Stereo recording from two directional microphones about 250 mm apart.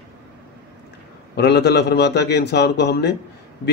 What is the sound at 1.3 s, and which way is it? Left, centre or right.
A man's voice, left.